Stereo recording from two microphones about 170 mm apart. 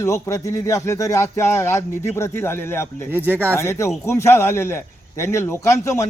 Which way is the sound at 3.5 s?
15° left (ahead or behind).